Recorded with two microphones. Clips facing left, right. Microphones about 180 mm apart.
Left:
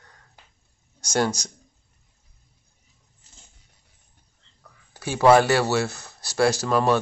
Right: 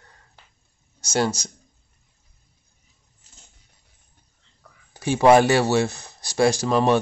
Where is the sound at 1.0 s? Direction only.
10° right (ahead or behind).